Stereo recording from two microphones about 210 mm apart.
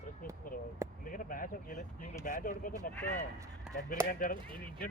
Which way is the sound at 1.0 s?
40° left (ahead or behind).